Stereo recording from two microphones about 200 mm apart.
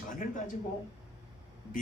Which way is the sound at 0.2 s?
40° left (ahead or behind).